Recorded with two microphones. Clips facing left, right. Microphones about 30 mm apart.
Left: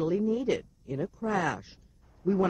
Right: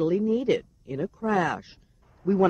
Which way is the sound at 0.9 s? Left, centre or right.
Centre.